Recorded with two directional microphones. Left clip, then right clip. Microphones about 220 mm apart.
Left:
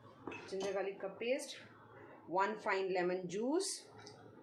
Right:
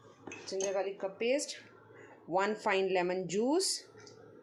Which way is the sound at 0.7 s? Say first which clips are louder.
Right 6 dB; 50° right (ahead or behind).